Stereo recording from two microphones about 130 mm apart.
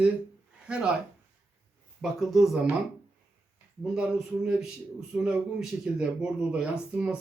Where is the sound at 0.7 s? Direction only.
5° right (ahead or behind).